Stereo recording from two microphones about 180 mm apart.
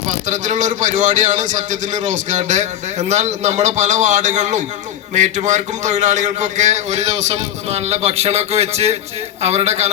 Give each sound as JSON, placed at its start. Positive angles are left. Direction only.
{"t": 0.3, "sound": "a man's voice", "side_deg": -45}